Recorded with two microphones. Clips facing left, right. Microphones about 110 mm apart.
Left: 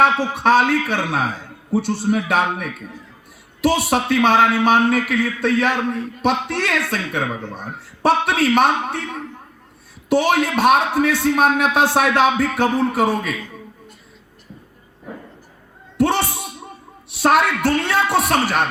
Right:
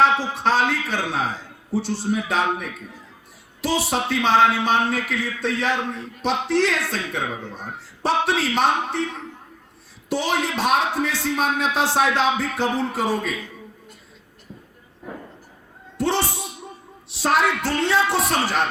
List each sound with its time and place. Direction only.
0.0 s a man's voice: 60° left (ahead or behind)
16.0 s a man's voice: 55° left (ahead or behind)